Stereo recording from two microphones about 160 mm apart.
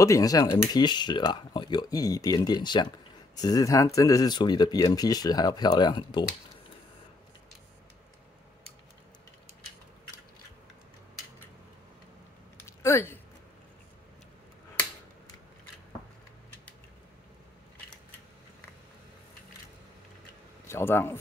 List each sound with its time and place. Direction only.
0.0 s speech: 20° left (ahead or behind)
12.5 s a sound: 15° left (ahead or behind)
20.6 s speech: 15° left (ahead or behind)